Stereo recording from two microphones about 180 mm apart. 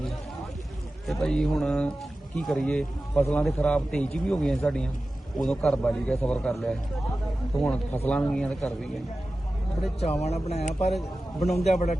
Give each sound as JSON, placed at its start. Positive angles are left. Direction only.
{"t": 1.0, "sound": "a man's voice", "side_deg": 0}
{"t": 10.0, "sound": "speech", "side_deg": 35}